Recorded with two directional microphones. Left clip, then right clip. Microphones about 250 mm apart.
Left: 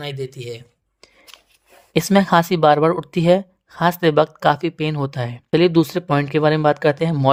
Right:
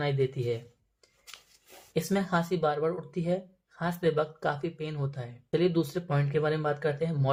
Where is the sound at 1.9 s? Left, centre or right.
Left.